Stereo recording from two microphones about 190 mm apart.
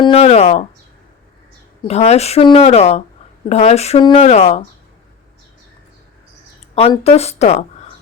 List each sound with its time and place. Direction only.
0.0 s speech: 30° left (ahead or behind)
1.9 s speech: 35° left (ahead or behind)
7.0 s speech: 35° left (ahead or behind)